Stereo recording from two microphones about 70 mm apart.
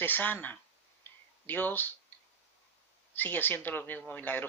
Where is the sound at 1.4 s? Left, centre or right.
Left.